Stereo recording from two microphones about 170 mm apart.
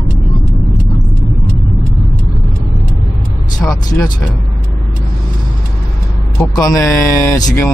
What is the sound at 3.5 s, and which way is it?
Speech, 20° left (ahead or behind).